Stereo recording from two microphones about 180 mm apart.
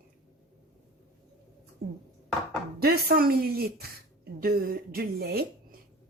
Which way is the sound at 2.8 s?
60° right (ahead or behind).